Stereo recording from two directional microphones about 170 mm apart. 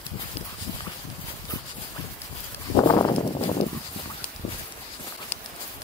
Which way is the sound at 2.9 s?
25° left (ahead or behind).